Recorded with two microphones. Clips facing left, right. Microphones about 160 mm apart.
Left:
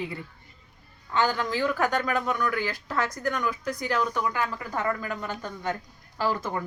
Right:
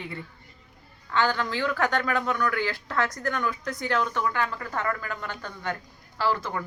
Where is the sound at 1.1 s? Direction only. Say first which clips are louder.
Even; 15° left (ahead or behind).